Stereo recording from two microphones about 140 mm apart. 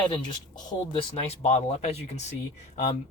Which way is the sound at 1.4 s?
50° left (ahead or behind).